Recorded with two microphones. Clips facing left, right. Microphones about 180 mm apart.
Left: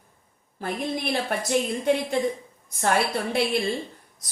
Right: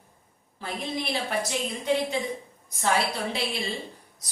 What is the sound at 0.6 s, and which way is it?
A woman's voice, 50° left (ahead or behind).